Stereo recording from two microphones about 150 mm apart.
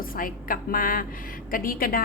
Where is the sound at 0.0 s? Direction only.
70° left (ahead or behind).